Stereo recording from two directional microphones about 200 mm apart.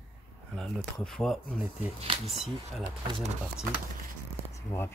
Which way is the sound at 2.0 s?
30° right (ahead or behind).